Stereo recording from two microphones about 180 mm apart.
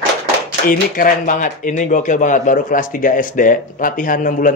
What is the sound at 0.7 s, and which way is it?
Speech, 50° left (ahead or behind).